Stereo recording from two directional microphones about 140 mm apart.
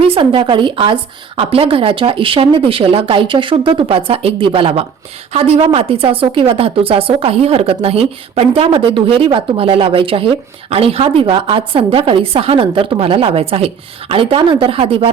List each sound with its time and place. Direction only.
0.0 s a woman's voice: 40° right (ahead or behind)